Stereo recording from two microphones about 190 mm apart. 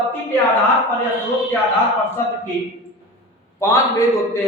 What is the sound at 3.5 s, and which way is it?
Speech, 15° left (ahead or behind).